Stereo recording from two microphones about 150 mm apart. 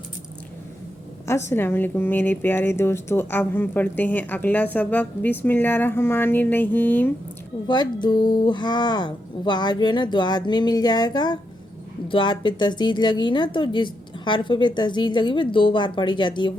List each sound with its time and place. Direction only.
1.3 s a woman's voice: 20° left (ahead or behind)
7.7 s a woman's voice: 30° left (ahead or behind)